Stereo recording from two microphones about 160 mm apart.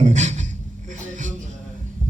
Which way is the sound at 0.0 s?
45° right (ahead or behind).